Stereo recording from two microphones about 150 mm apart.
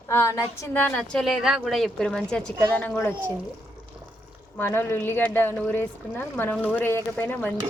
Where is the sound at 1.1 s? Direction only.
Centre (ahead or behind).